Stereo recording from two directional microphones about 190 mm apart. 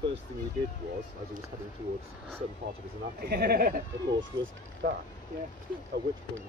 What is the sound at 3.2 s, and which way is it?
Speech, 55° right (ahead or behind).